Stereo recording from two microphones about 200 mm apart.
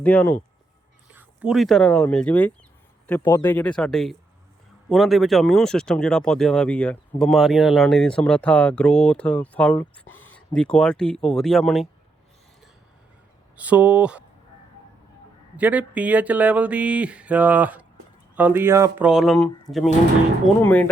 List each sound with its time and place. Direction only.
0.0 s speech: 10° left (ahead or behind)
1.1 s speech: 5° right (ahead or behind)
10.1 s a sound: 90° left
10.3 s speech: 5° left (ahead or behind)
13.6 s speech: 5° right (ahead or behind)
15.5 s speech: 5° right (ahead or behind)